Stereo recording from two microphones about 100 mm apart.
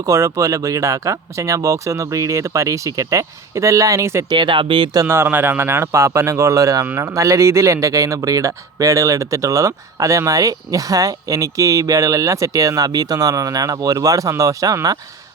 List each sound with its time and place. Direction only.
0.0 s speech: 35° right (ahead or behind)
4.3 s speech: 55° right (ahead or behind)
5.0 s speech: 25° right (ahead or behind)